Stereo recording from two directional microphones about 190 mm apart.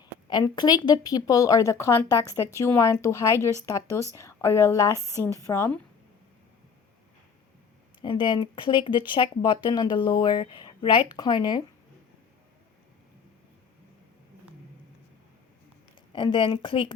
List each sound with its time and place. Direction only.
0.0 s speech: 20° left (ahead or behind)
8.0 s speech: 25° left (ahead or behind)
16.1 s speech: 25° left (ahead or behind)